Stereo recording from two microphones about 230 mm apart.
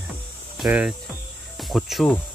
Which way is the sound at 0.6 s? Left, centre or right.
Centre.